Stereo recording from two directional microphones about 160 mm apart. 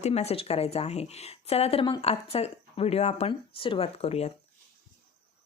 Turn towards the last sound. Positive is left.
turn(degrees=40)  # may be behind; listen again after turning